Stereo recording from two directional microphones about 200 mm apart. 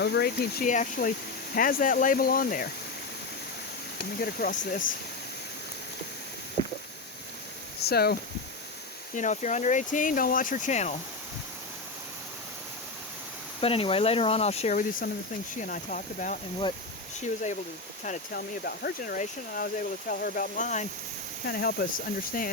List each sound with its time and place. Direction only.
0.0 s speech: 55° left (ahead or behind)
4.2 s speech: 45° left (ahead or behind)
7.8 s speech: 50° left (ahead or behind)
9.1 s speech: 35° left (ahead or behind)
13.6 s speech: 30° left (ahead or behind)
18.6 s speech: 50° left (ahead or behind)
21.4 s speech: 50° left (ahead or behind)